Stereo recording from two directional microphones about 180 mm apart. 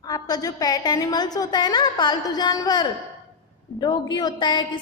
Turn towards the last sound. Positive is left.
turn(degrees=25)  # may be behind; listen again after turning